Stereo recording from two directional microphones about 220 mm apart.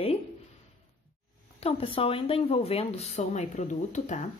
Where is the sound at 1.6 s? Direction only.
25° left (ahead or behind).